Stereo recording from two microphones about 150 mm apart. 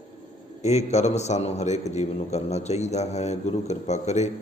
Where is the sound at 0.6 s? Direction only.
50° left (ahead or behind).